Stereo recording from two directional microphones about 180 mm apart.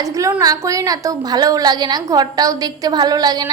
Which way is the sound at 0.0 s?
15° right (ahead or behind).